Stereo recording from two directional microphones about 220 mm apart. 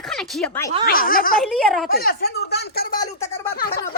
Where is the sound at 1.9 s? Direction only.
40° left (ahead or behind).